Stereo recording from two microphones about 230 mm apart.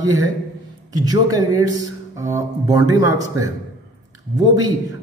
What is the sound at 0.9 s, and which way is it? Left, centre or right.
A man's voice, centre.